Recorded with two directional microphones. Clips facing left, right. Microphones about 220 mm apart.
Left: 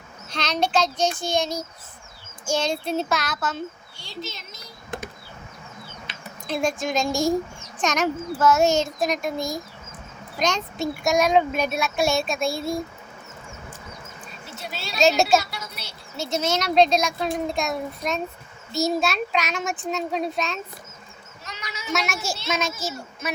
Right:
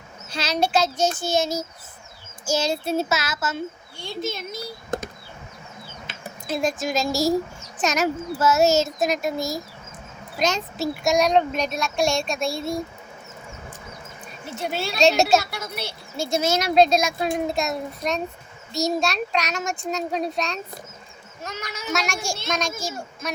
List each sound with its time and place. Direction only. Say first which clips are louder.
0.3 s speech: right 1 dB; 5° right (ahead or behind)
4.0 s speech: right 7 dB; 55° right (ahead or behind)
6.5 s speech: even; centre (ahead or behind)
14.6 s speech: right 9 dB; 50° right (ahead or behind)
14.9 s speech: even; centre (ahead or behind)
15.4 s a sound: right 6 dB; 50° right (ahead or behind)
16.1 s speech: right 2 dB; 10° right (ahead or behind)
21.4 s goat: right 4 dB; 50° right (ahead or behind)
21.9 s speech: even; 5° left (ahead or behind)